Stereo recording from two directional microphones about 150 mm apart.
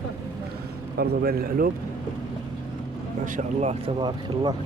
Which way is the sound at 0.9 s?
90° right.